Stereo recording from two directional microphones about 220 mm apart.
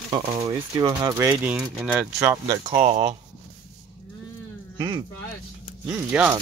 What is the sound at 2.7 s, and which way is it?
Speech, 30° right (ahead or behind).